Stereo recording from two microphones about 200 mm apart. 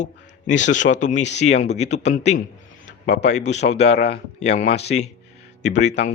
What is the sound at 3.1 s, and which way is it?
Speech, 60° left (ahead or behind).